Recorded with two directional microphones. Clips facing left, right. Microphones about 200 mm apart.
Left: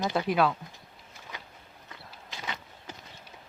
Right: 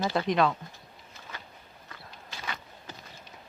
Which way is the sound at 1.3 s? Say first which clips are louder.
Even; 15° left (ahead or behind).